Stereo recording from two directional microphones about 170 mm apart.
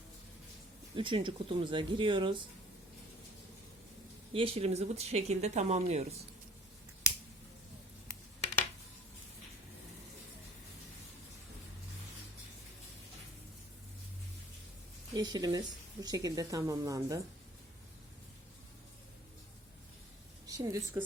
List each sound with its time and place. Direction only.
0.9 s speech: 30° right (ahead or behind)
4.4 s speech: 35° right (ahead or behind)
15.1 s speech: 25° right (ahead or behind)
20.5 s speech: 20° right (ahead or behind)